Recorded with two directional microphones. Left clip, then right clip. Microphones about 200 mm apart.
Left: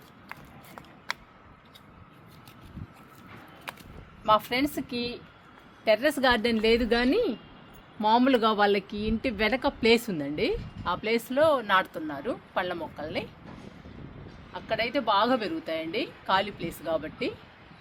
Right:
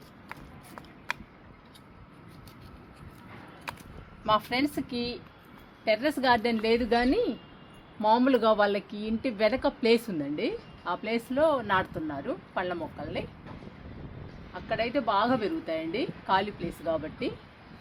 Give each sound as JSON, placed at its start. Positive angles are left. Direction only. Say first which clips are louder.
{"t": 3.7, "sound": "a sound", "louder": "right 1 dB", "side_deg": -5}
{"t": 4.3, "sound": "a woman's voice", "louder": "left 2 dB", "side_deg": 35}
{"t": 14.5, "sound": "speech", "louder": "left 1 dB", "side_deg": 50}